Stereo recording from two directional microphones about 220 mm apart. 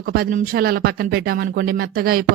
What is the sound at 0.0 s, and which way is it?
Speech, 45° right (ahead or behind).